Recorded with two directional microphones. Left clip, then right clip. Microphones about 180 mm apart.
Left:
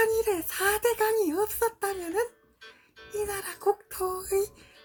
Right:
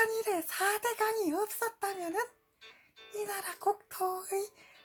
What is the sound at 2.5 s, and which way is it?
Music, 30° left (ahead or behind).